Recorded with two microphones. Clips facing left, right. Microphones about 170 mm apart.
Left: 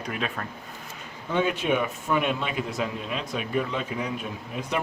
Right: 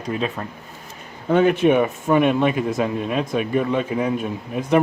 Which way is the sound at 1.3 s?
55° right (ahead or behind).